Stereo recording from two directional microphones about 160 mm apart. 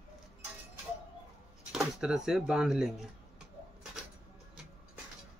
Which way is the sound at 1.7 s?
5° right (ahead or behind).